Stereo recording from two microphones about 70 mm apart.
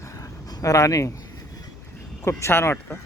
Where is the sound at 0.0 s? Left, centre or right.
Left.